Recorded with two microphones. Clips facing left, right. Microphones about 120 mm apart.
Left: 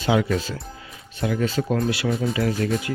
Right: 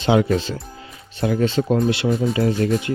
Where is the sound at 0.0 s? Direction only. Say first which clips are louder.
Right 4 dB; 30° right (ahead or behind).